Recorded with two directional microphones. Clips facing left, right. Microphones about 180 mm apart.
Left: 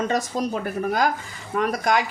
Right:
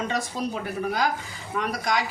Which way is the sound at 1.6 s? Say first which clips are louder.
Left 5 dB; 50° left (ahead or behind).